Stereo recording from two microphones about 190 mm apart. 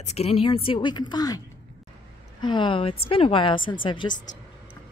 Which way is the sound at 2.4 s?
25° left (ahead or behind).